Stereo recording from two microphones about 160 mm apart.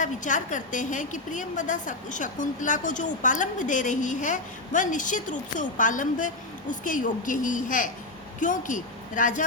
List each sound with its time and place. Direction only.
0.0 s a woman's voice: 50° left (ahead or behind)